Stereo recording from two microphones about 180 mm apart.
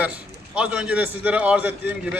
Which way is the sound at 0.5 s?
5° right (ahead or behind).